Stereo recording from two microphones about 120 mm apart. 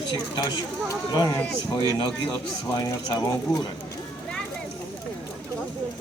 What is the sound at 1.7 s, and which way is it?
Speech, 45° left (ahead or behind).